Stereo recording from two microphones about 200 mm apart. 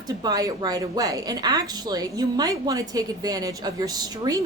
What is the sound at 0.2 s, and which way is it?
A woman's voice, 20° right (ahead or behind).